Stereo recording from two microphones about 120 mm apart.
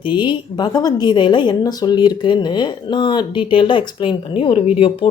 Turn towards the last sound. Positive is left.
turn(degrees=55)  # may be behind; listen again after turning